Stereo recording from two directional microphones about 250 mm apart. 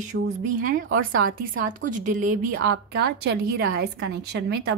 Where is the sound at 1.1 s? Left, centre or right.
Right.